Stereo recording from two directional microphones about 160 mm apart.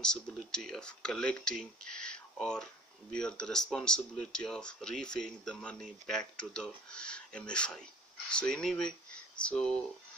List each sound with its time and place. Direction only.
0.0 s speech: 5° left (ahead or behind)